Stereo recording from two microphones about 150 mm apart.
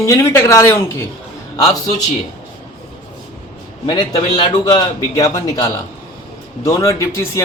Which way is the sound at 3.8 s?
25° left (ahead or behind).